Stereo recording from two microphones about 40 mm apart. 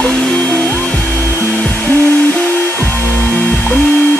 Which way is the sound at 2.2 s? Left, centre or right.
Left.